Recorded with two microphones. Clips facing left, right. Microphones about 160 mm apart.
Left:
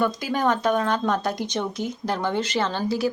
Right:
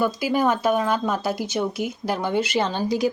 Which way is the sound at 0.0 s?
10° right (ahead or behind).